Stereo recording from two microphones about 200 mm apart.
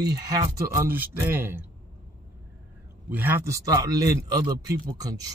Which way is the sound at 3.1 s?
10° right (ahead or behind).